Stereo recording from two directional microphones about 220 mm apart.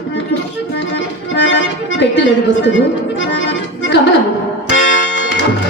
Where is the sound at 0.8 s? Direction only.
55° left (ahead or behind).